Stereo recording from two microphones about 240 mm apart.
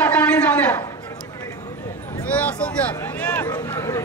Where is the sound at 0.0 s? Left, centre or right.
Centre.